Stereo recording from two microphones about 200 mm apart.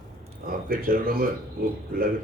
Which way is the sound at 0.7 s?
45° right (ahead or behind).